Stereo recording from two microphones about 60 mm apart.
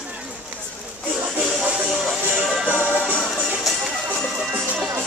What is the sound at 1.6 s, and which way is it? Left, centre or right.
Music, centre.